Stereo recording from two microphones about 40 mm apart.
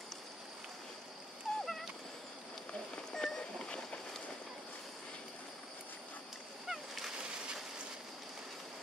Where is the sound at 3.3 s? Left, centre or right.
Centre.